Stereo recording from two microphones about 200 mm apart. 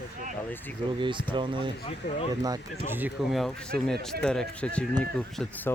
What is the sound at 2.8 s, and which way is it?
Speech, 10° right (ahead or behind).